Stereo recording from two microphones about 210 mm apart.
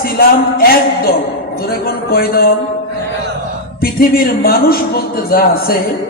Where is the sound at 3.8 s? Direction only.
45° left (ahead or behind).